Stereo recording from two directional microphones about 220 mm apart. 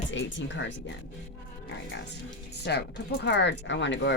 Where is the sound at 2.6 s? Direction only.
50° left (ahead or behind).